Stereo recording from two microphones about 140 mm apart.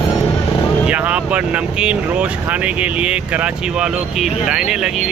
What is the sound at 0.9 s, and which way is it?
Speech, 10° right (ahead or behind).